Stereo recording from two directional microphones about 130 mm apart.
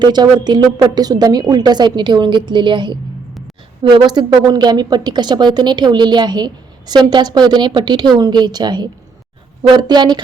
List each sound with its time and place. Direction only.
0.0 s a woman's voice: 35° right (ahead or behind)